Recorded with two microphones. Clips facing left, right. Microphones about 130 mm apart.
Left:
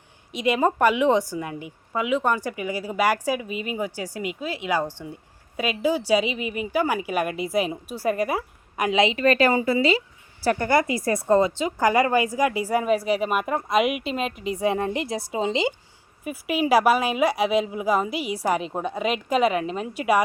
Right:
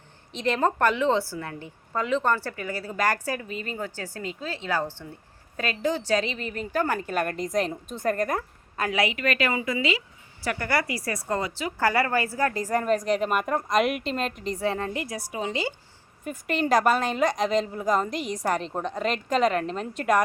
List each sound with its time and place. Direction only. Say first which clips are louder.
0.3 s a woman's voice: left 3 dB; 10° left (ahead or behind)
16.2 s a woman's voice: left 3 dB; 5° left (ahead or behind)